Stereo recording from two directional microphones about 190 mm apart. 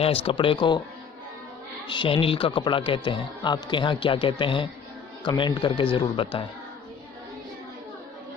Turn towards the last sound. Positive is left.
turn(degrees=25)  # may be behind; listen again after turning